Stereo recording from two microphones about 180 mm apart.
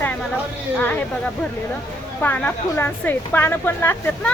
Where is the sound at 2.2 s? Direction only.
10° left (ahead or behind).